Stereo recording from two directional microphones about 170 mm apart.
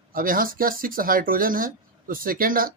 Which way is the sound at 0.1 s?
55° right (ahead or behind).